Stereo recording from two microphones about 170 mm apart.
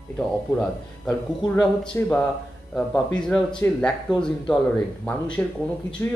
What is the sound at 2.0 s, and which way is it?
Speech, 15° left (ahead or behind).